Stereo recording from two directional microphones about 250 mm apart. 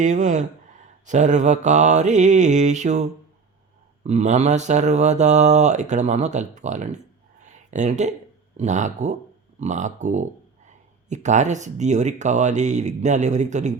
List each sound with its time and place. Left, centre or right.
0.0 s speech: right
7.4 s a sound: right
8.5 s speech: right